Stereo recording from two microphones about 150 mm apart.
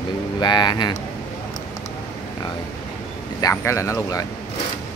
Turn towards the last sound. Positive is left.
turn(degrees=20)  # may be behind; listen again after turning